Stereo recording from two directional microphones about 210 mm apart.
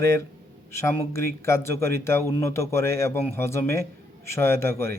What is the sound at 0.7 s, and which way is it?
A man's voice, 15° left (ahead or behind).